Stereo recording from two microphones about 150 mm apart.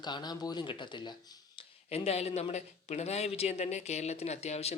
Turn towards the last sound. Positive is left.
turn(degrees=45)  # may be behind; listen again after turning